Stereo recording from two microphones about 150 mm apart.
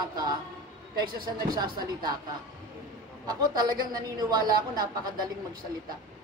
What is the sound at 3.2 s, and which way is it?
Speech, 30° right (ahead or behind).